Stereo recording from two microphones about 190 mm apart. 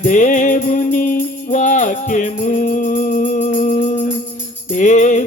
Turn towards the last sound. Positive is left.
turn(degrees=40)  # may be behind; listen again after turning